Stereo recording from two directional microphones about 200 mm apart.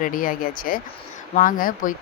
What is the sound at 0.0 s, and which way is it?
Speech, 45° left (ahead or behind).